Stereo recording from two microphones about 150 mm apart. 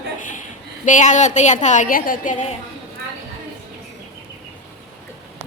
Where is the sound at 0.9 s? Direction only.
55° left (ahead or behind).